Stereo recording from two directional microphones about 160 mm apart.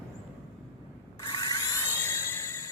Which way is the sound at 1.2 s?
25° left (ahead or behind).